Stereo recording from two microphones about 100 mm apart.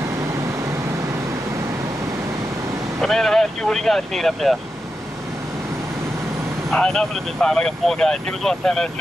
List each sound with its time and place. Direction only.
3.0 s speech: 5° left (ahead or behind)
6.7 s speech: 5° left (ahead or behind)